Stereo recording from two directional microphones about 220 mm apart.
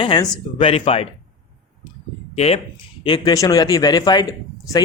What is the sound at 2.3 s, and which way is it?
A man's voice, 30° left (ahead or behind).